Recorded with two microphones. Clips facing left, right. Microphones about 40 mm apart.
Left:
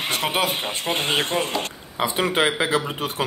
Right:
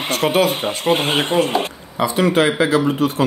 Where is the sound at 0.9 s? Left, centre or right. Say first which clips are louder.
Right 9 dB; right.